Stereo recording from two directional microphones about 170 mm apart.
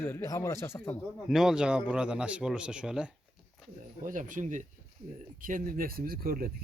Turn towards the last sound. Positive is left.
turn(degrees=-60)  # may be behind; listen again after turning